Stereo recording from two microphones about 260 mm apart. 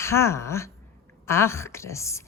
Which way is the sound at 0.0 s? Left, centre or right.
Centre.